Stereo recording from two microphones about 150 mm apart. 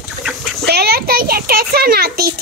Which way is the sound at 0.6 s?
90° right.